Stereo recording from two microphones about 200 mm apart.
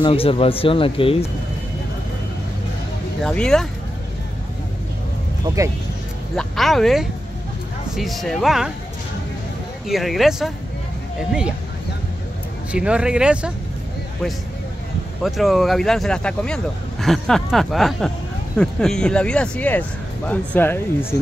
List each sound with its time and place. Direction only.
0.0 s speech: 30° left (ahead or behind)
3.3 s speech: 5° left (ahead or behind)
6.3 s speech: centre (ahead or behind)
9.8 s speech: centre (ahead or behind)
12.7 s speech: 5° right (ahead or behind)
15.2 s speech: centre (ahead or behind)